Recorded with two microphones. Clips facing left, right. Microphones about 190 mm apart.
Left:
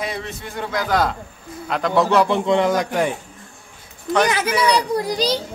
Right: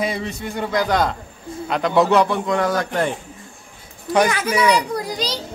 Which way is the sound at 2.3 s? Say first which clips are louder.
Left 3 dB; 20° left (ahead or behind).